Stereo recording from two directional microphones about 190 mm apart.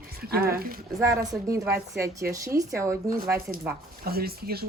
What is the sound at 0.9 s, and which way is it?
Speech, 15° right (ahead or behind).